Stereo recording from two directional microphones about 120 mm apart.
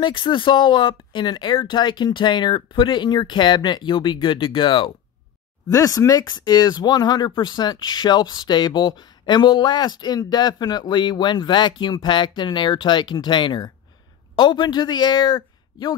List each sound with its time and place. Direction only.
0.0 s speech: 45° left (ahead or behind)
5.7 s speech: 30° left (ahead or behind)